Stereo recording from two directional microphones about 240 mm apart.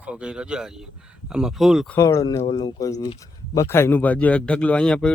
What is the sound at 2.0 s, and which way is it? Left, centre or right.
Speech, centre.